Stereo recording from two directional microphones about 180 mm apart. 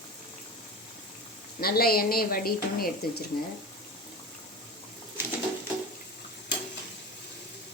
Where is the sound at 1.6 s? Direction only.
55° left (ahead or behind).